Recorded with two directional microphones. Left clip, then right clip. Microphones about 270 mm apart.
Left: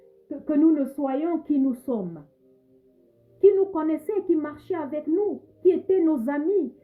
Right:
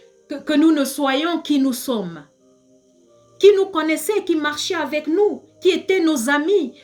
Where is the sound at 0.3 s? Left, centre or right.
Centre.